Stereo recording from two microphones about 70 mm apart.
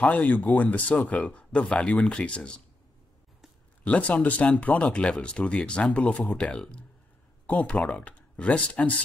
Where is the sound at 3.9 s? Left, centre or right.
Centre.